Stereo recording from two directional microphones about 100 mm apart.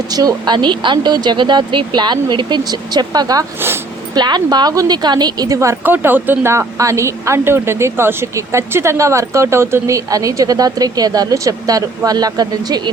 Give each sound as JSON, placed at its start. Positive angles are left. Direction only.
{"t": 0.1, "sound": "speech", "side_deg": -40}
{"t": 5.5, "sound": "a woman's voice", "side_deg": -25}